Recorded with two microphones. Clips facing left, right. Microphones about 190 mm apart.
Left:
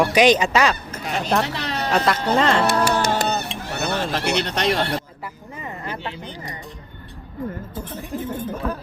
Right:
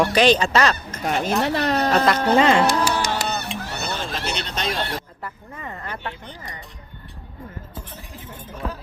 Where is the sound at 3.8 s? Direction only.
70° left (ahead or behind).